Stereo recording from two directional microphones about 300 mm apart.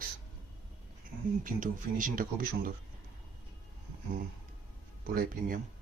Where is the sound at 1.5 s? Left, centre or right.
Right.